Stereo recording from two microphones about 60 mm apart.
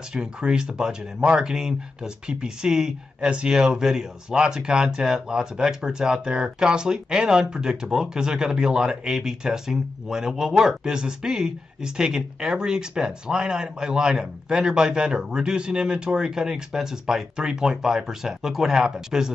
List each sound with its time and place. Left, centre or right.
0.1 s speech: centre